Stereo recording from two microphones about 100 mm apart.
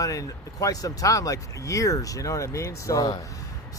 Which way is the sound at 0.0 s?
35° left (ahead or behind).